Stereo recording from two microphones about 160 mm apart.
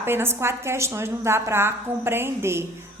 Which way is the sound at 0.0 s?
15° right (ahead or behind).